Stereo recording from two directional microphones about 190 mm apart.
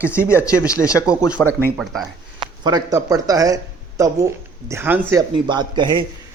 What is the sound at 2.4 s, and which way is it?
Speech, 20° right (ahead or behind).